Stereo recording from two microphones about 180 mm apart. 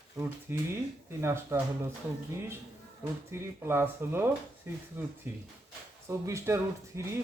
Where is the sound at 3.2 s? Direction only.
15° right (ahead or behind).